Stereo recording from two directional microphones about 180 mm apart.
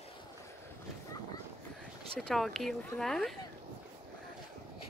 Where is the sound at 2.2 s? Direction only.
Centre (ahead or behind).